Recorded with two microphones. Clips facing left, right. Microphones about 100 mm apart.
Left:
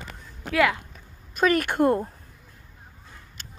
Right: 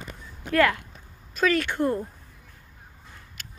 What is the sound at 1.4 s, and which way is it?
Speech, 55° left (ahead or behind).